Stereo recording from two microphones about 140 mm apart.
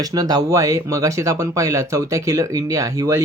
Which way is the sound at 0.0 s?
25° right (ahead or behind).